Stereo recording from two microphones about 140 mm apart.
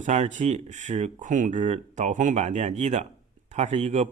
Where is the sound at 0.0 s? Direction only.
55° right (ahead or behind).